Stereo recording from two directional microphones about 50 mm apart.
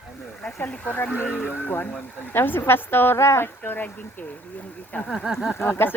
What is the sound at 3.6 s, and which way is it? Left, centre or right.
Speech, left.